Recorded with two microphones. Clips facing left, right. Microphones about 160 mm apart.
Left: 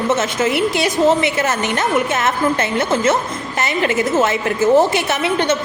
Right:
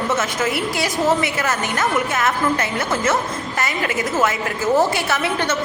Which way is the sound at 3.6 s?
25° left (ahead or behind).